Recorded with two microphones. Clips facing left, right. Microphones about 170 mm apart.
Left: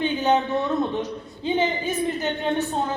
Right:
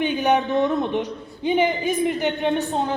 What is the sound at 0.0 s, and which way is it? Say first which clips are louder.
A woman's voice: right 1 dB; 15° right (ahead or behind).